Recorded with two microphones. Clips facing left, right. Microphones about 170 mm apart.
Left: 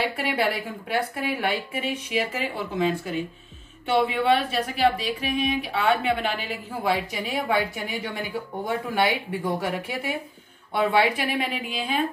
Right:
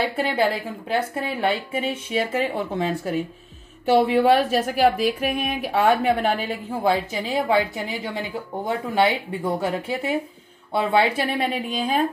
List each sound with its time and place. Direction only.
0.1 s a woman's voice: 30° right (ahead or behind); by 5.9 s 50° right (ahead or behind)
6.0 s a woman's voice: 40° right (ahead or behind)
6.9 s a woman's voice: 25° right (ahead or behind)